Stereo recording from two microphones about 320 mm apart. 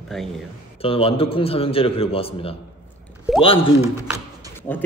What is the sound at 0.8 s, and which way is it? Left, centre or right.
A man's voice, centre.